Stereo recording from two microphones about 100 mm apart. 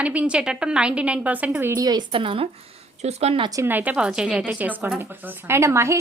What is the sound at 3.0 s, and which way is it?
Speech, 90° right.